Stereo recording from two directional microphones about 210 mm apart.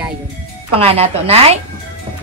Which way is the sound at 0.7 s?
30° right (ahead or behind).